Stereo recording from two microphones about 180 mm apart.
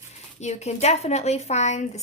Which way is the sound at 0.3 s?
40° left (ahead or behind).